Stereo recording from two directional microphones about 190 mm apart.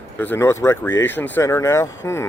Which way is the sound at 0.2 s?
10° left (ahead or behind).